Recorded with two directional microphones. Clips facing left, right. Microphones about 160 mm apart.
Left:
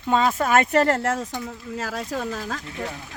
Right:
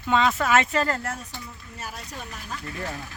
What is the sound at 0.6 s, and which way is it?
Speech, 65° left (ahead or behind).